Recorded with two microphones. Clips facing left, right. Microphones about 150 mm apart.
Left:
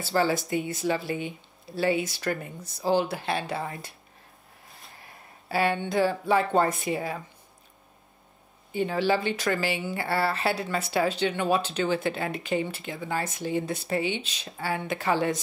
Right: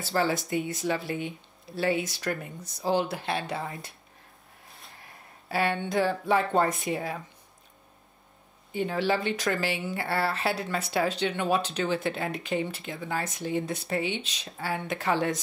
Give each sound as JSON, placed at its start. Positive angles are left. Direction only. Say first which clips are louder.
{"t": 0.0, "sound": "speech", "louder": "left 2 dB", "side_deg": 0}
{"t": 5.5, "sound": "speech", "louder": "left 2 dB", "side_deg": 0}
{"t": 8.7, "sound": "speech", "louder": "left 2 dB", "side_deg": 0}